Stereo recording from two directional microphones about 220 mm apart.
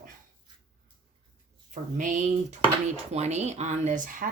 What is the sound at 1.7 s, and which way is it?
Speech, 35° right (ahead or behind).